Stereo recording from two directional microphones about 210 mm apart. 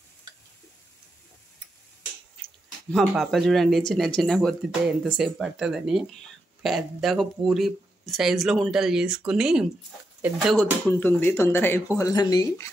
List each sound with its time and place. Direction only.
2.9 s speech: centre (ahead or behind); by 12.6 s 20° left (ahead or behind)